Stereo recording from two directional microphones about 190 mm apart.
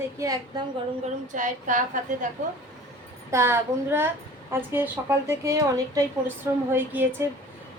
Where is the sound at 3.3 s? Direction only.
15° right (ahead or behind).